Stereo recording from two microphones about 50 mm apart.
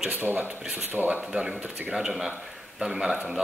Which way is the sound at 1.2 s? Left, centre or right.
Centre.